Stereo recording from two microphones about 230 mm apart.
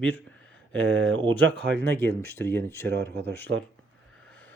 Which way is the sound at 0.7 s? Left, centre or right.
Right.